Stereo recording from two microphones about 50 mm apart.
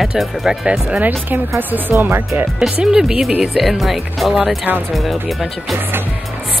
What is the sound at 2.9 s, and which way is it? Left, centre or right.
Speech, centre.